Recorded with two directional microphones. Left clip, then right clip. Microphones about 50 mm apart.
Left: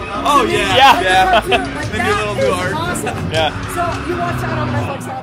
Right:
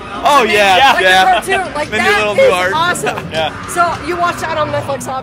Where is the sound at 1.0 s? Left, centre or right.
Right.